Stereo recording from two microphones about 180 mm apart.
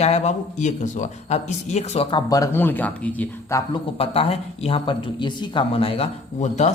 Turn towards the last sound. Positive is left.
turn(degrees=40)  # may be behind; listen again after turning